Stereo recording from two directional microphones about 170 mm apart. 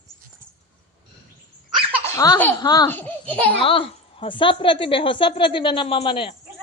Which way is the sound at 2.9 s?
10° left (ahead or behind).